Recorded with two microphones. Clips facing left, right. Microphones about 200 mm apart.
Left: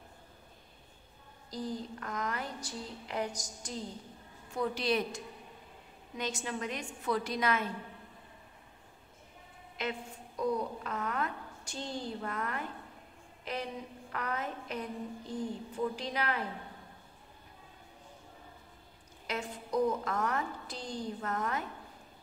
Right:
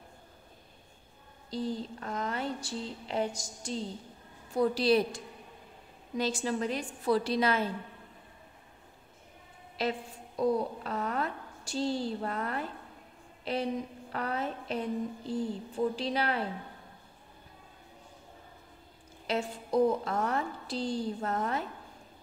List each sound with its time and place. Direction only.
1.5 s a woman's voice: 25° right (ahead or behind)
9.8 s a woman's voice: 35° right (ahead or behind)
13.4 s a sound: 30° right (ahead or behind)
14.1 s a woman's voice: 30° right (ahead or behind)
19.2 s a woman's voice: 30° right (ahead or behind)